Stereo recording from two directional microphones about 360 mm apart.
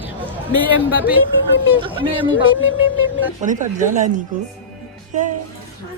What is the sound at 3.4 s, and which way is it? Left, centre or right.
Speech, right.